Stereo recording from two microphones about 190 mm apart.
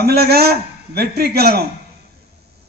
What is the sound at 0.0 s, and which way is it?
A man's voice, 55° right (ahead or behind).